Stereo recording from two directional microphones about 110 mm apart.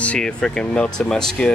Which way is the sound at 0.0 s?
10° left (ahead or behind).